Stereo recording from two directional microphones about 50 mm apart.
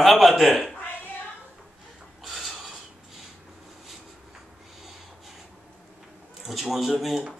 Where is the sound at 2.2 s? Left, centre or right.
Centre.